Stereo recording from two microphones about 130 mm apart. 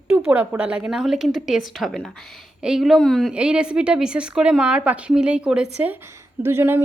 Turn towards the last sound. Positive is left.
turn(degrees=-15)  # may be behind; listen again after turning